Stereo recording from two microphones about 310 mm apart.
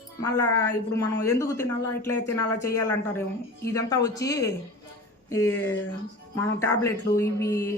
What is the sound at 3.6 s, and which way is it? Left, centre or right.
Speech, centre.